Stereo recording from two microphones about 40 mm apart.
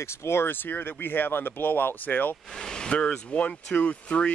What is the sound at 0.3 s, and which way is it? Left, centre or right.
Speech, left.